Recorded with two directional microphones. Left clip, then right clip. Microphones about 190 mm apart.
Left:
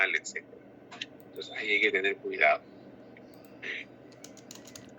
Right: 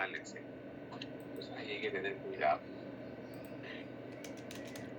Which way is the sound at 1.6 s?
50° left (ahead or behind).